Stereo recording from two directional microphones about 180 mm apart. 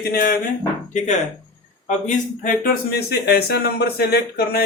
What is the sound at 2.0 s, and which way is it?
Speech, 50° left (ahead or behind).